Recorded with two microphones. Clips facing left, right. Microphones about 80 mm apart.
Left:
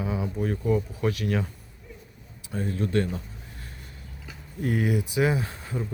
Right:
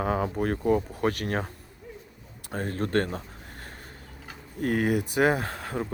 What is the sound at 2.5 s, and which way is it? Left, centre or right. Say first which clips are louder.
Speech: even; right.